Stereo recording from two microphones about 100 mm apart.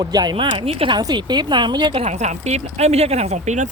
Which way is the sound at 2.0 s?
90° right.